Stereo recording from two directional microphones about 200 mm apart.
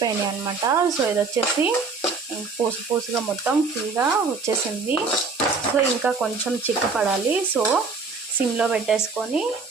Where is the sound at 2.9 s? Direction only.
20° right (ahead or behind).